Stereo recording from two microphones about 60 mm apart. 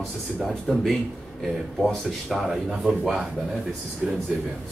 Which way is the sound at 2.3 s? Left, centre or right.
Centre.